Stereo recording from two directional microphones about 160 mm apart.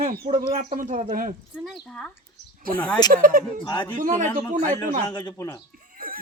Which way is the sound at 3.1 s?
60° right (ahead or behind).